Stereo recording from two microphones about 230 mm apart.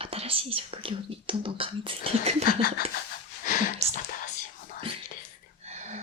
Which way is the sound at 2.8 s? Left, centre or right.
Left.